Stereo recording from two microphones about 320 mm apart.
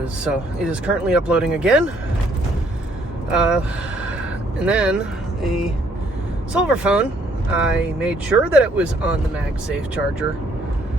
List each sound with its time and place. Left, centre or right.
0.0 s speech: centre
3.3 s speech: centre
4.6 s speech: centre
6.5 s speech: centre